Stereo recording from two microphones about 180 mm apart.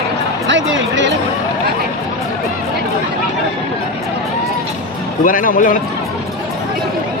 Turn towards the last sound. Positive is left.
turn(degrees=50)  # may be behind; listen again after turning